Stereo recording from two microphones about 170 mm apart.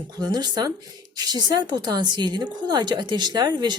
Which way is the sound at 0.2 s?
25° right (ahead or behind).